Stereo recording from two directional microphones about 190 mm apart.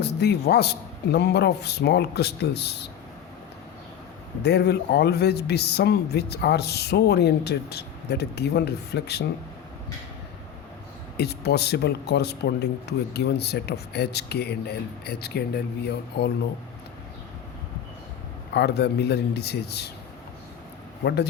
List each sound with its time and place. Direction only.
0.0 s speech: 60° left (ahead or behind)
4.4 s speech: 60° left (ahead or behind)
11.2 s speech: 60° left (ahead or behind)
18.5 s speech: 60° left (ahead or behind)